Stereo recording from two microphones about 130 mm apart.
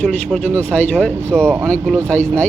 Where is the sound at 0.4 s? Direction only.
10° left (ahead or behind).